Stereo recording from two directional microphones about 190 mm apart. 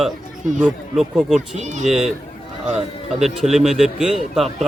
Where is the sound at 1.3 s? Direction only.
40° right (ahead or behind).